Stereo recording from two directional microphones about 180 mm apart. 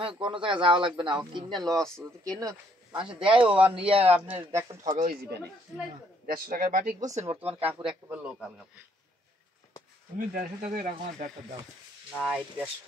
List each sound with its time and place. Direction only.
0.0 s speech: 30° right (ahead or behind)
4.1 s speech: 10° right (ahead or behind)
4.9 s speech: 50° right (ahead or behind)
7.2 s speech: 35° right (ahead or behind)
7.6 s a man's voice: 10° right (ahead or behind)
10.1 s speech: 50° right (ahead or behind)
12.2 s a man's voice: 5° right (ahead or behind)